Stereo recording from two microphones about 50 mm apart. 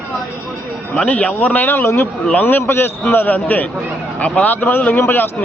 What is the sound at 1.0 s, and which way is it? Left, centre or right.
A man's voice, left.